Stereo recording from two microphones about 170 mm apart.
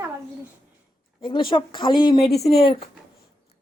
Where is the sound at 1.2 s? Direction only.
30° left (ahead or behind).